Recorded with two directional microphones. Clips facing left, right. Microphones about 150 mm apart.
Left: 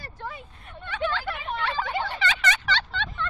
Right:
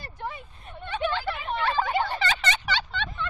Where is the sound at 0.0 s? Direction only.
20° right (ahead or behind).